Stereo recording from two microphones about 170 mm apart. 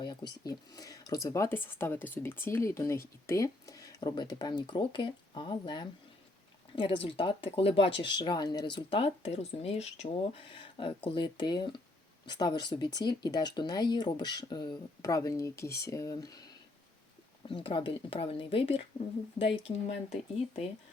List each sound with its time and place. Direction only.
0.0 s a sound: 25° left (ahead or behind)
0.4 s speech: 20° left (ahead or behind)
17.5 s speech: 30° left (ahead or behind)